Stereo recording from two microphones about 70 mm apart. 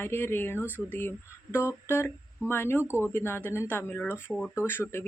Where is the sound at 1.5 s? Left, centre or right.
Left.